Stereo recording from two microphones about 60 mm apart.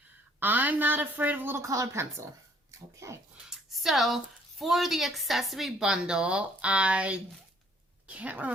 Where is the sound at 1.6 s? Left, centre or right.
Right.